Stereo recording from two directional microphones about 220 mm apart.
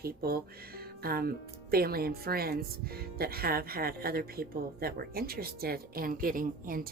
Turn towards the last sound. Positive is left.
turn(degrees=-40)  # may be behind; listen again after turning